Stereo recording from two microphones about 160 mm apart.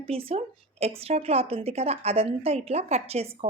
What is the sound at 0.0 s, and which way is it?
A woman's voice, 35° right (ahead or behind).